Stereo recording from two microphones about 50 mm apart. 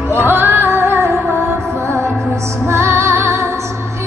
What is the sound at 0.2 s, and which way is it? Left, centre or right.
Music, right.